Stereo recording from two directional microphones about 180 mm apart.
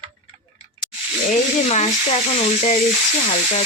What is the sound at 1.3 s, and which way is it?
Speech, 40° left (ahead or behind).